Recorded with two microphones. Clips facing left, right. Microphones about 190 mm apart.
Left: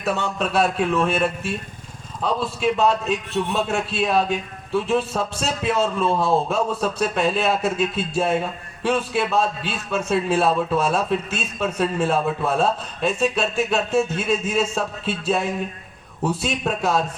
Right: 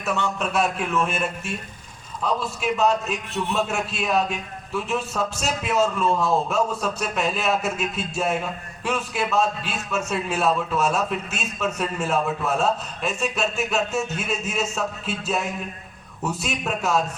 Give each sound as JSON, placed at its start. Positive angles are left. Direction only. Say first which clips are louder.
{"t": 0.0, "sound": "a man's voice", "louder": "left 2 dB", "side_deg": 35}